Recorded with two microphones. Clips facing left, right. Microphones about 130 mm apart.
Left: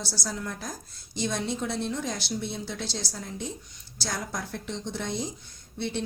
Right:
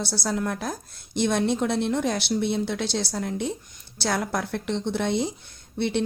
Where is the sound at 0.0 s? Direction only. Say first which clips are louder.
Right 7 dB; 60° right (ahead or behind).